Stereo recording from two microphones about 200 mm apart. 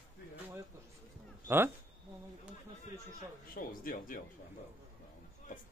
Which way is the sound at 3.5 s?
45° left (ahead or behind).